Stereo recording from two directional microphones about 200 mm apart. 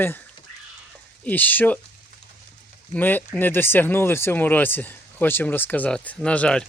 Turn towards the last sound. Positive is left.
turn(degrees=5)  # may be behind; listen again after turning